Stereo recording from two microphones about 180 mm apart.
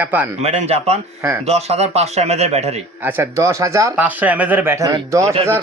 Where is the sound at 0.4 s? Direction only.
35° right (ahead or behind).